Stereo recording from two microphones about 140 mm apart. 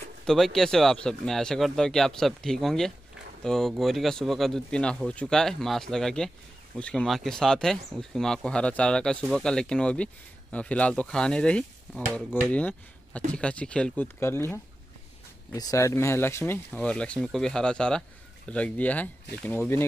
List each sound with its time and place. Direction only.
0.3 s speech: 5° left (ahead or behind)
12.4 s speech: 10° left (ahead or behind)